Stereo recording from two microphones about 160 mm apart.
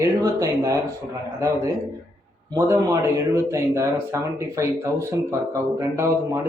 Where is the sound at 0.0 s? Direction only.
20° right (ahead or behind).